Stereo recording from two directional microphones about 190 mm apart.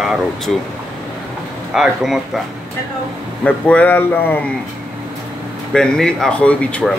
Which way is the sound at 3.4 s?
5° left (ahead or behind).